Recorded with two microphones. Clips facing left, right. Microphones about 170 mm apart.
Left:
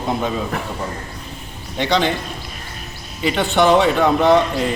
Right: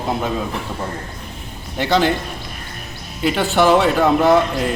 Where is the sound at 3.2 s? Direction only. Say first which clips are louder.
Even; centre (ahead or behind).